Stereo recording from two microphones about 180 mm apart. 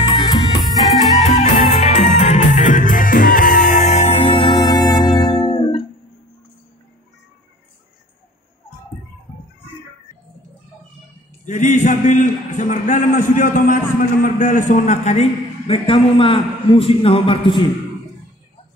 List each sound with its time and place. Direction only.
0.0 s music: 30° left (ahead or behind)
1.2 s music: 40° left (ahead or behind)
11.4 s a man's voice: 45° left (ahead or behind); by 17.6 s 30° left (ahead or behind)